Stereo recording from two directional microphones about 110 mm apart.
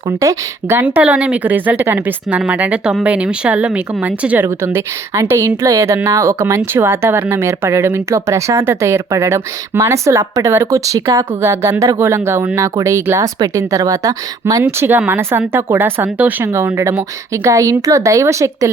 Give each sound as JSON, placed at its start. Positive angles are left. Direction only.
{"t": 0.2, "sound": "speech", "side_deg": -30}
{"t": 0.8, "sound": "speech", "side_deg": -15}
{"t": 4.4, "sound": "speech", "side_deg": -25}
{"t": 14.6, "sound": "speech", "side_deg": -20}